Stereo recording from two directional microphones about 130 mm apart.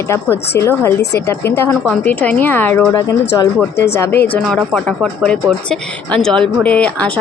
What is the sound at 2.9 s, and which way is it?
A woman's voice, 30° left (ahead or behind).